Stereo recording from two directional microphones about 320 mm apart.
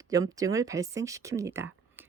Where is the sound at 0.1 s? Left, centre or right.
Centre.